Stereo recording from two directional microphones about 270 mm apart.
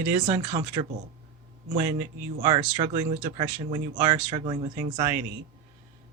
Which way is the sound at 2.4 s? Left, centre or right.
Centre.